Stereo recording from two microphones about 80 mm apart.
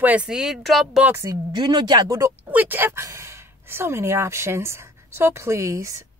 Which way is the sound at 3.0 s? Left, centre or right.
Right.